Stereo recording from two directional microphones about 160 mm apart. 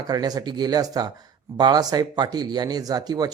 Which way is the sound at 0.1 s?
25° right (ahead or behind).